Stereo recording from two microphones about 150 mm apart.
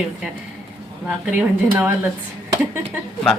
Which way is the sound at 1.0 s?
5° right (ahead or behind).